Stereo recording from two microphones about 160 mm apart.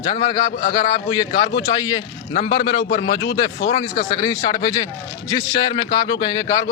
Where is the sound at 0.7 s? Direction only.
30° left (ahead or behind).